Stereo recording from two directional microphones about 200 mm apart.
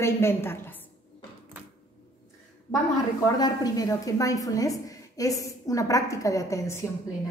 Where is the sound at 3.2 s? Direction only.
20° left (ahead or behind).